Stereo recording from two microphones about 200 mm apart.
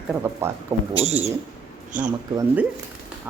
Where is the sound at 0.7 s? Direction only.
30° right (ahead or behind).